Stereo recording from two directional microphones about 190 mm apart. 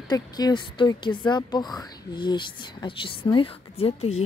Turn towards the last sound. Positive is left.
turn(degrees=30)  # may be behind; listen again after turning